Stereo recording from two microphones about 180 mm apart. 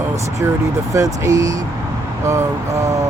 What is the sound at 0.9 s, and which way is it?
Speech, 20° right (ahead or behind).